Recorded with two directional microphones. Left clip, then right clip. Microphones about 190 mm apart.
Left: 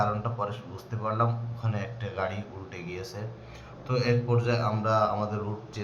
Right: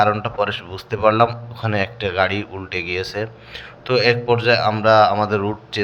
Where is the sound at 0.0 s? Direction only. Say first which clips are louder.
Right 12 dB; 35° right (ahead or behind).